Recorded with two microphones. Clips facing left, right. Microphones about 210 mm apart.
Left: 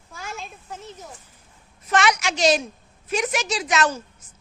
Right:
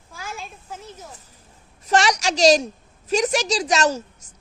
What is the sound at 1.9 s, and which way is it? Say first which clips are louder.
A woman's voice: right 2 dB; 35° right (ahead or behind).